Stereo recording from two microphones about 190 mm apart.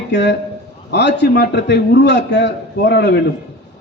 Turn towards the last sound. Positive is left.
turn(degrees=65)  # may be behind; listen again after turning